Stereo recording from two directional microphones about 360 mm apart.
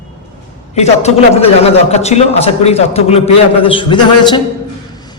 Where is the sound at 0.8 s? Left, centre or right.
Centre.